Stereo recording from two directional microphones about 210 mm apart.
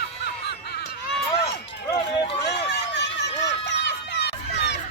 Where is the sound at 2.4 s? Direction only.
55° left (ahead or behind).